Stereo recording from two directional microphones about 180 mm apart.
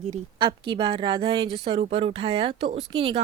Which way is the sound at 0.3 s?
25° right (ahead or behind).